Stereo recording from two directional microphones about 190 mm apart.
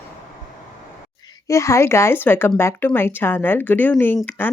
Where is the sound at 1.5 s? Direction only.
15° left (ahead or behind).